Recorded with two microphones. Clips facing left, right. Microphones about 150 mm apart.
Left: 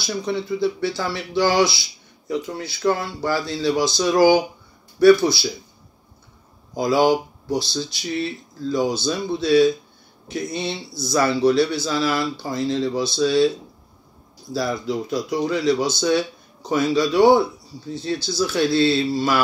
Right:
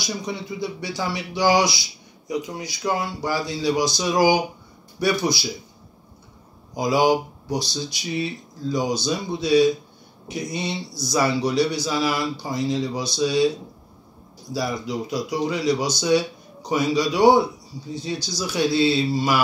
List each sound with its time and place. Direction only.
0.0 s a man's voice: 15° right (ahead or behind)
6.8 s a man's voice: 15° right (ahead or behind)
14.5 s a man's voice: 15° right (ahead or behind)